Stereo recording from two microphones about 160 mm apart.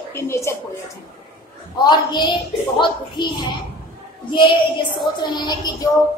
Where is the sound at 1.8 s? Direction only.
25° left (ahead or behind).